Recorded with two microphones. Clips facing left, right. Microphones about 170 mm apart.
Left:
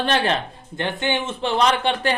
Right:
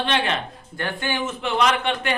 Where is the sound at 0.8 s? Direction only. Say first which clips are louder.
Left 3 dB; 20° left (ahead or behind).